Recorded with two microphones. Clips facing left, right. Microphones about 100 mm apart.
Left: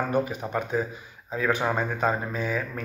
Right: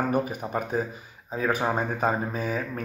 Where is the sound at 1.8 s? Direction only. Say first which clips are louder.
Even; 10° right (ahead or behind).